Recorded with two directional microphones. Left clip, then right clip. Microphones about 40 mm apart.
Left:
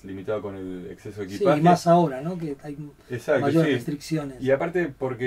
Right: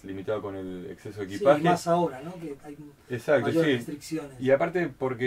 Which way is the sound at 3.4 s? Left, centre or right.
Left.